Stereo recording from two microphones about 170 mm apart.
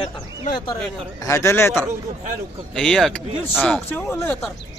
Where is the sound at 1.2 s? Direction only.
15° left (ahead or behind).